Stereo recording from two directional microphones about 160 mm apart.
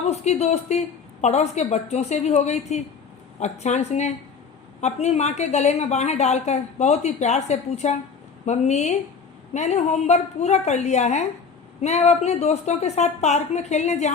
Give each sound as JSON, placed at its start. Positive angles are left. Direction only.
{"t": 0.1, "sound": "a woman's voice", "side_deg": 40}